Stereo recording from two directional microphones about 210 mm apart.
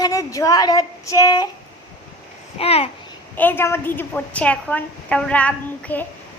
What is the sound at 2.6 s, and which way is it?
Speech, 25° left (ahead or behind).